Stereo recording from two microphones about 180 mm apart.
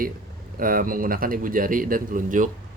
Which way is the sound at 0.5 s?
50° right (ahead or behind).